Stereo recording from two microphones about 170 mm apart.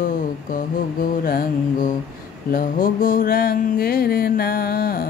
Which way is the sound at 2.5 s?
55° left (ahead or behind).